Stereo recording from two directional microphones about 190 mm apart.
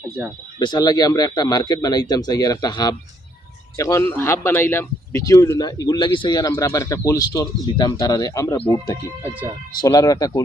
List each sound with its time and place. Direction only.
0.2 s speech: 10° right (ahead or behind)
0.6 s a man's voice: 20° left (ahead or behind)
9.2 s speech: 10° right (ahead or behind)
9.8 s speech: 20° left (ahead or behind)